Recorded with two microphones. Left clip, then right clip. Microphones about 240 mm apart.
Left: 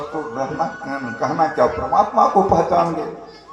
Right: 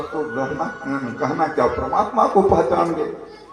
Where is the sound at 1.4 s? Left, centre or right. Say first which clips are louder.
Left 2 dB; left.